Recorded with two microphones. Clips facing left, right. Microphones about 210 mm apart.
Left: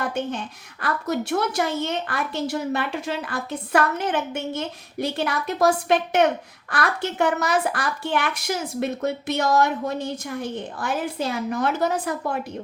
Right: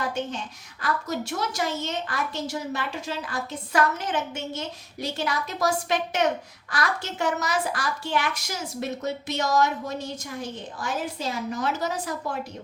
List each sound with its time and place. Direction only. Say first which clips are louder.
0.8 s a child's voice: left 3 dB; 60° left (ahead or behind)